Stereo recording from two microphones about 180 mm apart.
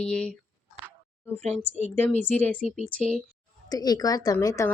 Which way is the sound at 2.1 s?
40° right (ahead or behind).